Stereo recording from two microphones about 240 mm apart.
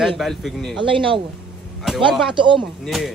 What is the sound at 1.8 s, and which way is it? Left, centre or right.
Speech, centre.